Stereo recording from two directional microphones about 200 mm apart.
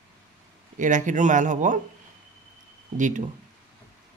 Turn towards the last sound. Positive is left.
turn(degrees=-40)  # may be behind; listen again after turning